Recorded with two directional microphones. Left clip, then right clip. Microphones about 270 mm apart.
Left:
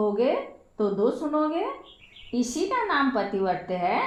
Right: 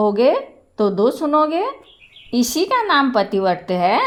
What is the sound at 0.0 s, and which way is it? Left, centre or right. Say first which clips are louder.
A woman's voice: right 9 dB; right.